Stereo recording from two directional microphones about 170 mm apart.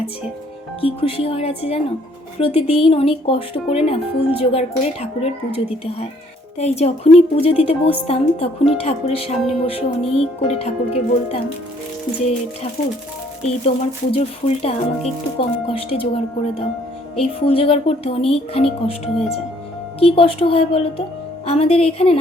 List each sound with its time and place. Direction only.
0.8 s speech: 35° left (ahead or behind)
13.4 s speech: 35° left (ahead or behind)